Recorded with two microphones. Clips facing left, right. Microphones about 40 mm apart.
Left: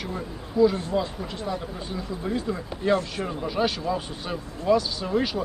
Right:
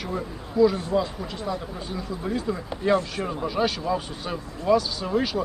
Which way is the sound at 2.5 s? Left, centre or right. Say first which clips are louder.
Right 2 dB; centre.